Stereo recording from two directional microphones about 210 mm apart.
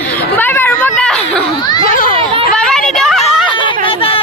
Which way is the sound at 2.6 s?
5° left (ahead or behind).